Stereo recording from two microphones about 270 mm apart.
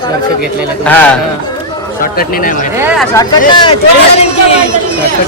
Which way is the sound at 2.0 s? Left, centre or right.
Left.